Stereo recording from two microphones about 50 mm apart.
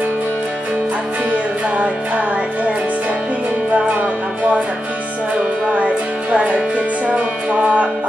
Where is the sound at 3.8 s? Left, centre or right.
Right.